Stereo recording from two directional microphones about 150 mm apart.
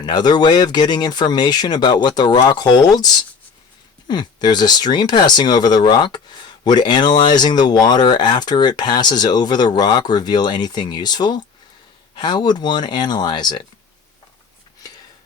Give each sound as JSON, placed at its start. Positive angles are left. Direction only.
{"t": 0.0, "sound": "speech", "side_deg": 30}
{"t": 4.1, "sound": "speech", "side_deg": 30}